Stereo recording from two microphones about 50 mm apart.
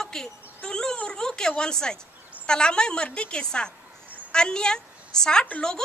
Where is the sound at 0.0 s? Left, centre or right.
Centre.